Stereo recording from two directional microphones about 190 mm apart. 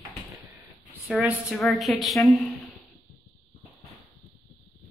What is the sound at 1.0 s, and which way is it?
A woman's voice, 5° right (ahead or behind).